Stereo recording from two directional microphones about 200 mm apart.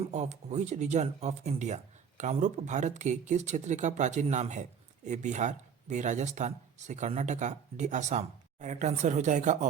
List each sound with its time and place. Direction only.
0.0 s speech: 35° right (ahead or behind)